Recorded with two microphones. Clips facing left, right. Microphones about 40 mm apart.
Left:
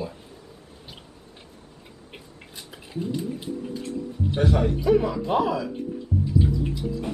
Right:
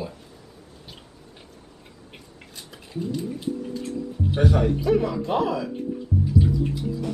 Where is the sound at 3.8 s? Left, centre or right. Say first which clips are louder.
Right 1 dB; centre.